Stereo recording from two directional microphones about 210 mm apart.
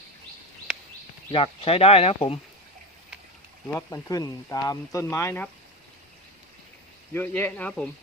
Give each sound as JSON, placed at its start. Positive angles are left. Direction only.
{"t": 1.3, "sound": "speech", "side_deg": 25}
{"t": 3.7, "sound": "speech", "side_deg": 10}
{"t": 7.1, "sound": "speech", "side_deg": 10}